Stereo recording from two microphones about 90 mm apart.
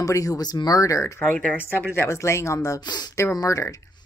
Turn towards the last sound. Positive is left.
turn(degrees=40)  # may be behind; listen again after turning